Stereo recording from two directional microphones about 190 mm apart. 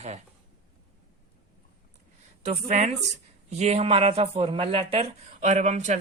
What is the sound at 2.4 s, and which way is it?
Speech, 40° right (ahead or behind).